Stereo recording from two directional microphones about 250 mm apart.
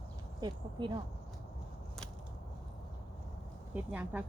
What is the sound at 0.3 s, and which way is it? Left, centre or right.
Speech, centre.